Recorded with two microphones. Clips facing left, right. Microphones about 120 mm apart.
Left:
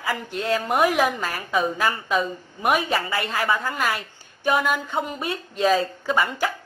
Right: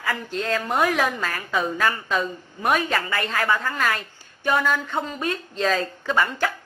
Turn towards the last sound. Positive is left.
turn(degrees=10)  # may be behind; listen again after turning